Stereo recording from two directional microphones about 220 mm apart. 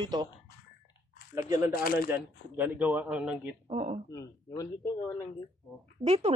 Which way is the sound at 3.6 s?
30° right (ahead or behind).